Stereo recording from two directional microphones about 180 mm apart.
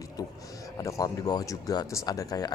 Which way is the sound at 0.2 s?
20° left (ahead or behind).